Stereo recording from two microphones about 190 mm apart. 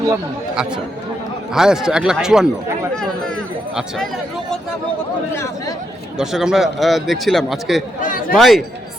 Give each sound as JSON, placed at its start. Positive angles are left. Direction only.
{"t": 0.5, "sound": "a man's voice", "side_deg": -5}
{"t": 5.3, "sound": "speech", "side_deg": 15}
{"t": 6.1, "sound": "a man's voice", "side_deg": 0}
{"t": 8.0, "sound": "speech", "side_deg": 45}
{"t": 8.4, "sound": "a man's voice", "side_deg": 0}